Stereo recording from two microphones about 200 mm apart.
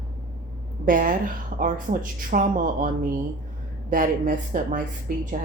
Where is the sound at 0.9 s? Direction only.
40° right (ahead or behind).